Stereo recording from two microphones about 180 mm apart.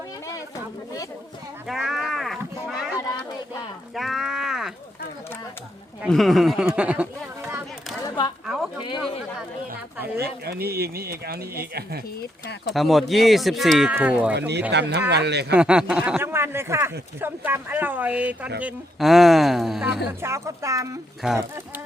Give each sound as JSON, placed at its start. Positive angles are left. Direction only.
{"t": 0.3, "sound": "a sound", "side_deg": 20}
{"t": 1.6, "sound": "livestock", "side_deg": 0}
{"t": 3.9, "sound": "a sound", "side_deg": 0}
{"t": 6.1, "sound": "speech", "side_deg": 0}
{"t": 8.0, "sound": "a sound", "side_deg": 25}
{"t": 8.8, "sound": "speech", "side_deg": 25}
{"t": 10.2, "sound": "speech", "side_deg": -60}
{"t": 12.7, "sound": "speech", "side_deg": 0}
{"t": 14.3, "sound": "speech", "side_deg": -70}
{"t": 15.5, "sound": "speech", "side_deg": -5}
{"t": 20.2, "sound": "speech", "side_deg": -15}
{"t": 21.2, "sound": "speech", "side_deg": 0}